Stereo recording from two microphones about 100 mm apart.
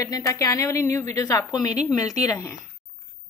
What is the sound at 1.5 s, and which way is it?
A woman's voice, 40° left (ahead or behind).